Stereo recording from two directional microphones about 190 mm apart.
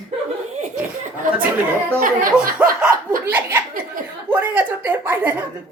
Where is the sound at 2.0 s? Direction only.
45° right (ahead or behind).